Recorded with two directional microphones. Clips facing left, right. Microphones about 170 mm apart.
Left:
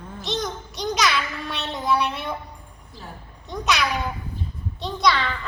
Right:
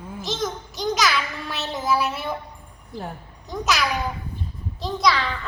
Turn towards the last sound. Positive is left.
turn(degrees=0)  # may be behind; listen again after turning